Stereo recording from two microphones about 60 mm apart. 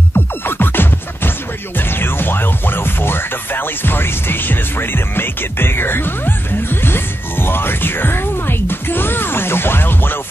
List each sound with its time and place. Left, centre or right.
0.1 s music: left